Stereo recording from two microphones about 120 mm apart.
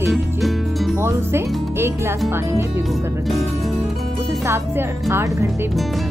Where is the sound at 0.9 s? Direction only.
20° right (ahead or behind).